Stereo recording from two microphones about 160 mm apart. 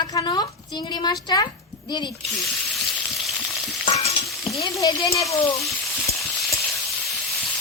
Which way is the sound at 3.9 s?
40° left (ahead or behind).